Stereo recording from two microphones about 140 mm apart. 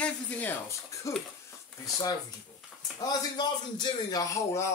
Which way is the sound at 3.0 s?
30° left (ahead or behind).